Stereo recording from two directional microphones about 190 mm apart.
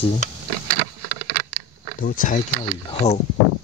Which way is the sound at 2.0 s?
45° left (ahead or behind).